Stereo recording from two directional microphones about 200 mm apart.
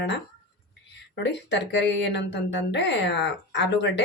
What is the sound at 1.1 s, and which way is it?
Speech, 60° left (ahead or behind).